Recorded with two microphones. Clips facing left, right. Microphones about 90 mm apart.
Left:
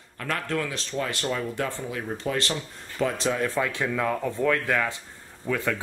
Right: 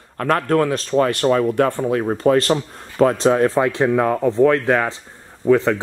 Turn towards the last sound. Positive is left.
turn(degrees=-30)  # may be behind; listen again after turning